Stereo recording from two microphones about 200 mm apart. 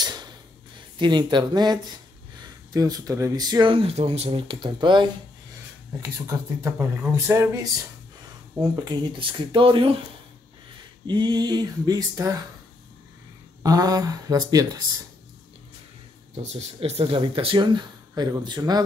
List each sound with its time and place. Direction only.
0.0 s a sound: 20° right (ahead or behind)
0.9 s speech: 25° right (ahead or behind)
6.2 s speech: 10° right (ahead or behind)
11.1 s speech: 20° right (ahead or behind)
13.6 s speech: 20° right (ahead or behind)
16.5 s speech: 30° right (ahead or behind)